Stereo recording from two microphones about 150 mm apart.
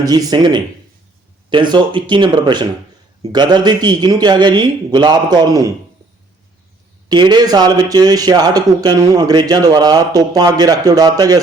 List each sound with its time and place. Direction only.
0.0 s speech: 25° right (ahead or behind)
7.1 s speech: 30° right (ahead or behind)